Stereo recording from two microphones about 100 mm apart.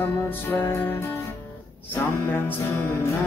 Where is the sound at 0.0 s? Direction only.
20° left (ahead or behind).